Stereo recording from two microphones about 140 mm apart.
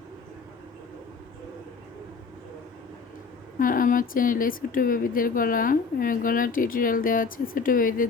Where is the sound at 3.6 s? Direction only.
75° left (ahead or behind).